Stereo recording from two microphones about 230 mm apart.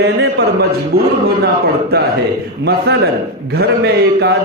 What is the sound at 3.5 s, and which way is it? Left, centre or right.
Speech, right.